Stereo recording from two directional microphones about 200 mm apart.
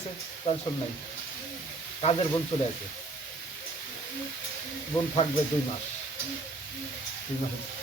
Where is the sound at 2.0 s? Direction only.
30° left (ahead or behind).